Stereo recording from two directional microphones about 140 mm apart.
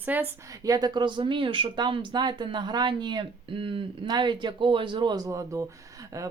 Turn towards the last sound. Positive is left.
turn(degrees=-25)  # may be behind; listen again after turning